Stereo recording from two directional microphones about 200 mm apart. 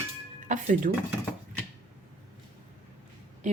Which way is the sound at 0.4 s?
40° right (ahead or behind).